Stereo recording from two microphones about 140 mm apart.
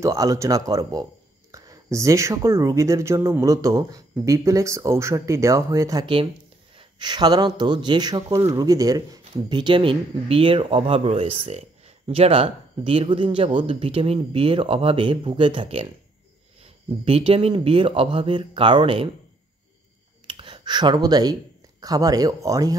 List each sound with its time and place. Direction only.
0.0 s speech: 25° right (ahead or behind); by 15.9 s 40° right (ahead or behind)
17.0 s speech: 45° right (ahead or behind)
20.2 s speech: 40° right (ahead or behind)